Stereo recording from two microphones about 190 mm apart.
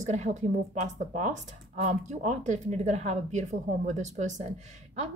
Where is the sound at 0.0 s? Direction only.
40° right (ahead or behind).